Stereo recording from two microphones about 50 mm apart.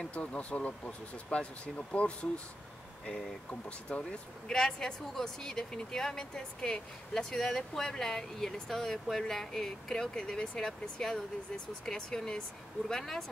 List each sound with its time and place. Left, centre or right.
0.1 s speech: left
3.6 s speech: left